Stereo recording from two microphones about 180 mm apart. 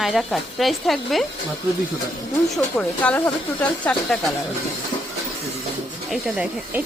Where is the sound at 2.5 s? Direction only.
5° left (ahead or behind).